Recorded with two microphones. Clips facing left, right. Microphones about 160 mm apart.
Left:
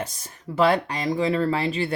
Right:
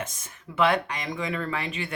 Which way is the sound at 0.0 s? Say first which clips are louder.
Left 3 dB; 35° left (ahead or behind).